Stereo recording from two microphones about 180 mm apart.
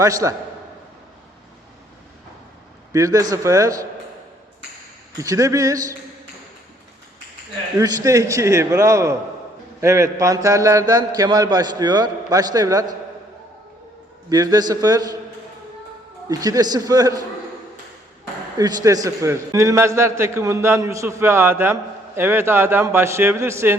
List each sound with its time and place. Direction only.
0.0 s a man's voice: 15° right (ahead or behind)
2.9 s a man's voice: 20° right (ahead or behind)
5.2 s a man's voice: 20° right (ahead or behind)
7.8 s a man's voice: 15° right (ahead or behind)
14.3 s a man's voice: 20° right (ahead or behind)
16.3 s a man's voice: 20° right (ahead or behind)
18.5 s a man's voice: 20° right (ahead or behind)